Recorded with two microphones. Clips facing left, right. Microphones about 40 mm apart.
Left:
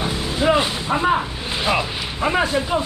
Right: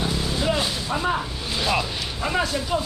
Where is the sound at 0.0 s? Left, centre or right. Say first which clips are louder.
Left 4 dB; left.